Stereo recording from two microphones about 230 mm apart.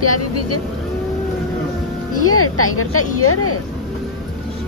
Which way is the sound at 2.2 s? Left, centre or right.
Left.